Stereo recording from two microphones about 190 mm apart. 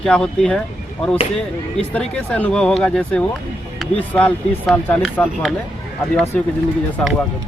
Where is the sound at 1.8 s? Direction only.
5° left (ahead or behind).